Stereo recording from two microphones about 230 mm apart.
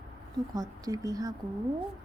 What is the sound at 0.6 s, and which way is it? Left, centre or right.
Speech, centre.